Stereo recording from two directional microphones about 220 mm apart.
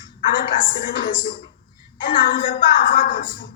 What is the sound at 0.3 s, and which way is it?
Speech, 40° left (ahead or behind).